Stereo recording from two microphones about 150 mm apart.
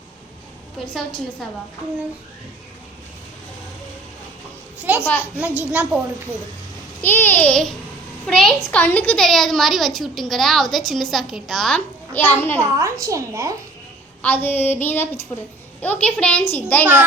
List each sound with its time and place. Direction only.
4.8 s a woman's voice: 10° right (ahead or behind)
5.0 s a child's voice: 15° left (ahead or behind)
5.5 s a woman's voice: 10° right (ahead or behind)
7.0 s a child's voice: 15° left (ahead or behind)
12.1 s a child's voice: 15° left (ahead or behind)
12.5 s a woman's voice: 20° right (ahead or behind)
14.2 s a child's voice: 15° left (ahead or behind)